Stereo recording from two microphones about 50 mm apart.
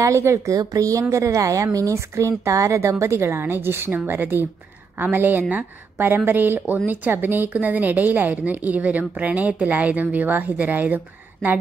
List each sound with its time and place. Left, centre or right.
0.0 s a woman's voice: right
7.4 s a woman's voice: right